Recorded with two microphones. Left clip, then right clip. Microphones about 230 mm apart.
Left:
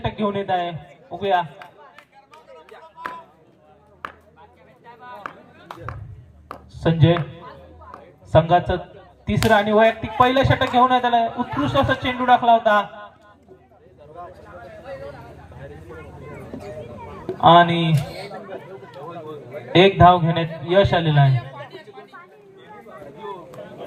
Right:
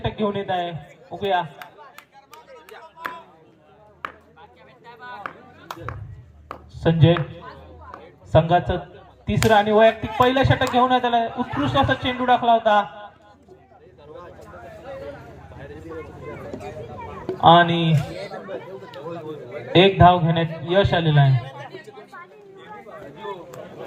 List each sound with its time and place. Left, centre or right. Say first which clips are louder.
0.0 s a man's voice: left 1 dB; left
1.5 s a sound: right 1 dB; right
4.0 s a sound: right 1 dB; centre
4.9 s a sound: right 1 dB; right
5.7 s chop: right 2 dB; right
6.7 s speech: even; left
8.3 s speech: left 2 dB; left
17.4 s speech: left 1 dB; left
19.7 s speech: left 1 dB; left
21.7 s chatter: right 1 dB; centre